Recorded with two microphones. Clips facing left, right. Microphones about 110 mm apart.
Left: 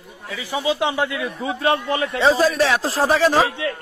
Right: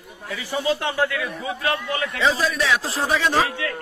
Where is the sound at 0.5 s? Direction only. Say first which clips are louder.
Left 2 dB; 15° left (ahead or behind).